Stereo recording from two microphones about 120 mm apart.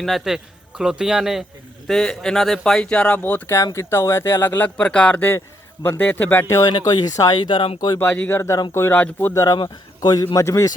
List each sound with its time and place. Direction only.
0.0 s a man's voice: centre (ahead or behind); by 6.4 s 15° left (ahead or behind)
6.4 s a man's voice: 30° left (ahead or behind); by 7.8 s 45° left (ahead or behind)
7.9 s speech: 15° left (ahead or behind)
9.6 s a man's voice: 35° left (ahead or behind)